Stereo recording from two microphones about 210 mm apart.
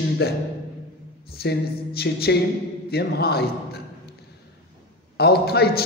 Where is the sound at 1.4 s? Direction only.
50° left (ahead or behind).